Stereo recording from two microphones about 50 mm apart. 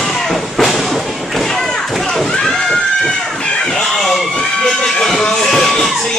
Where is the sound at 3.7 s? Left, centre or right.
Centre.